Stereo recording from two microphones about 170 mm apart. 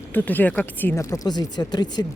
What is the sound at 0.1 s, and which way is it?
Speech, 10° left (ahead or behind).